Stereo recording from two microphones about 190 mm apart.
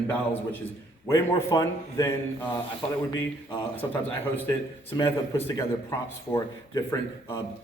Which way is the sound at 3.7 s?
10° left (ahead or behind).